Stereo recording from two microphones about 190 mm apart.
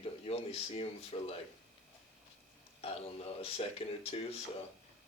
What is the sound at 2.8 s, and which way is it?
Speech, 30° left (ahead or behind).